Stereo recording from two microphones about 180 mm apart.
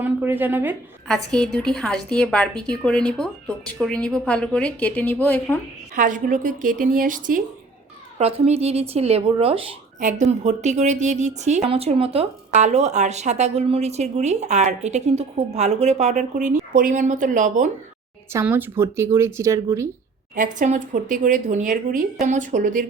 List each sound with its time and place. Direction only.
0.0 s speech: 10° right (ahead or behind)
1.0 s a woman's voice: 5° left (ahead or behind)
6.0 s speech: 45° right (ahead or behind)
8.2 s speech: 35° right (ahead or behind)
10.0 s speech: 40° right (ahead or behind)
18.3 s speech: 15° right (ahead or behind)
20.3 s speech: 45° right (ahead or behind)